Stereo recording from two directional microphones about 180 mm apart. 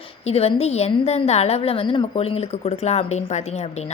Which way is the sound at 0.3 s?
35° left (ahead or behind).